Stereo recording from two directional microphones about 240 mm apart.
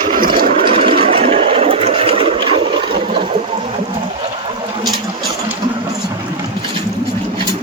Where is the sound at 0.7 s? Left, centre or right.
Right.